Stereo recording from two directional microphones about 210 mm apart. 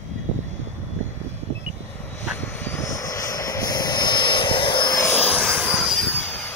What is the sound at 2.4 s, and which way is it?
Vehicle, 10° left (ahead or behind).